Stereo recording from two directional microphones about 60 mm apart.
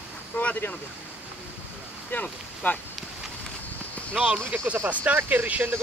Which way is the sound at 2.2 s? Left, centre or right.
Left.